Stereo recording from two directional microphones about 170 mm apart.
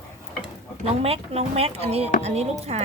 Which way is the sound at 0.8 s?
35° right (ahead or behind).